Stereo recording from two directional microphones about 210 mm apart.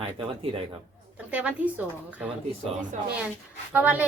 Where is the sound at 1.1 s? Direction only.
5° right (ahead or behind).